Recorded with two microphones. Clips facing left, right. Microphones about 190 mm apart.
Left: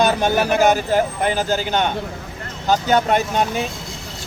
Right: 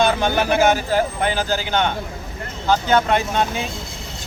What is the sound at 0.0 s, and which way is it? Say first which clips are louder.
Speech: left 1 dB; 40° left (ahead or behind).